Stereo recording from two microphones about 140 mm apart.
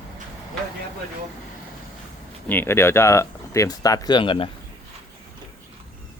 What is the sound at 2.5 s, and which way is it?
Speech, 15° left (ahead or behind).